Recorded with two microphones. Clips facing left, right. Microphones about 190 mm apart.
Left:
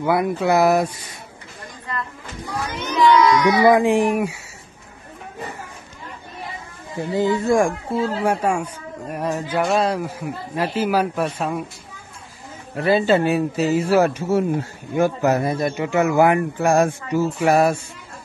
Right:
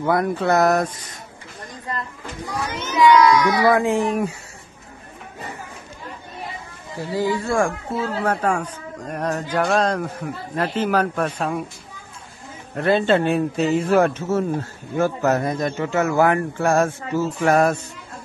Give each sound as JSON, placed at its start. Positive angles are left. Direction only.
{"t": 0.0, "sound": "a man's voice", "side_deg": 5}
{"t": 2.9, "sound": "speech", "side_deg": 0}
{"t": 3.5, "sound": "a man's voice", "side_deg": 15}
{"t": 7.0, "sound": "a man's voice", "side_deg": 20}
{"t": 12.7, "sound": "a man's voice", "side_deg": 5}